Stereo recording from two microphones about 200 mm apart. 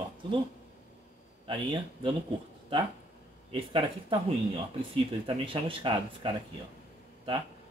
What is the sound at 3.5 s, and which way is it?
Speech, 25° right (ahead or behind).